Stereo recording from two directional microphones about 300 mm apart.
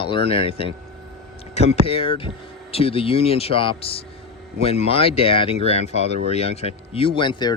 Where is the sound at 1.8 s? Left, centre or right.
Centre.